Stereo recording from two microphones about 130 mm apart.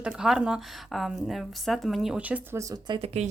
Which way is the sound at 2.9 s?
55° right (ahead or behind).